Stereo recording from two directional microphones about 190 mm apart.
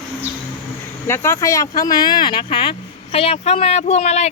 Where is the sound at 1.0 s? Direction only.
15° left (ahead or behind).